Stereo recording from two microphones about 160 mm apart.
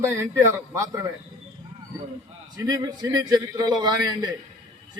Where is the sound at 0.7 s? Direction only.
20° right (ahead or behind).